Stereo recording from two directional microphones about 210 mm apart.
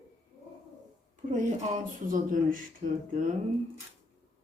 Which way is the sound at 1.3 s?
35° right (ahead or behind).